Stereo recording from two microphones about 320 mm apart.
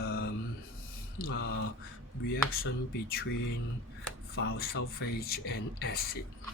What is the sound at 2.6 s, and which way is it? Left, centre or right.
Speech, left.